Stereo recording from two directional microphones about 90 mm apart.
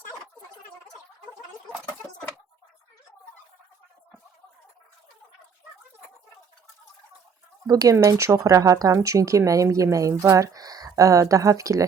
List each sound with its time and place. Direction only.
7.7 s speech: 40° right (ahead or behind)